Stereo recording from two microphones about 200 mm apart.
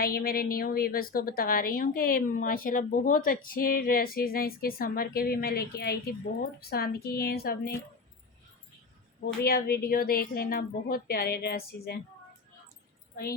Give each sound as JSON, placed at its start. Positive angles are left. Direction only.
{"t": 0.0, "sound": "a woman's voice", "side_deg": 50}
{"t": 9.2, "sound": "a woman's voice", "side_deg": 50}